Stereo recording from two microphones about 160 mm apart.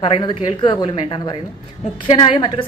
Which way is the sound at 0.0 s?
30° left (ahead or behind).